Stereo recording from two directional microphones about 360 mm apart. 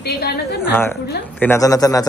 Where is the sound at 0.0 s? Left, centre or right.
Left.